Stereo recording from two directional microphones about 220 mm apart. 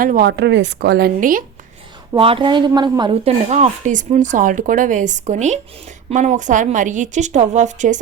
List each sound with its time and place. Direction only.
0.0 s speech: 40° right (ahead or behind)
2.1 s speech: 25° right (ahead or behind)